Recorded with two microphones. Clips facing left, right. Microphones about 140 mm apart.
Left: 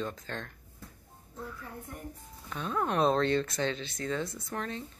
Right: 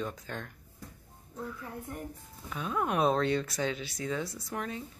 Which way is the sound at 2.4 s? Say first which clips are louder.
Even; 5° right (ahead or behind).